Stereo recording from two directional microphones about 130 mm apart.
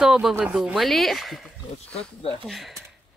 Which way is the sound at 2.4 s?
Centre (ahead or behind).